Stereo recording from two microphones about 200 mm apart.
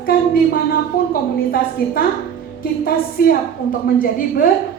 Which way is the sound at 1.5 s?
50° left (ahead or behind).